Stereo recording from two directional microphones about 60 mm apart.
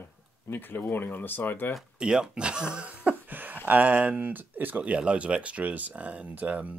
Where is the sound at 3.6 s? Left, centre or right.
Right.